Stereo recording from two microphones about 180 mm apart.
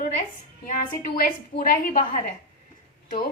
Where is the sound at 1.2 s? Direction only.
50° left (ahead or behind).